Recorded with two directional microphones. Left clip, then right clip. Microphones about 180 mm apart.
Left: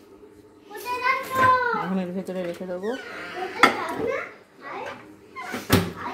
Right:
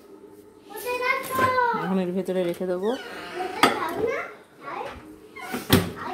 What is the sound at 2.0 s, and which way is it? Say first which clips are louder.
Speech: right 4 dB; 20° right (ahead or behind).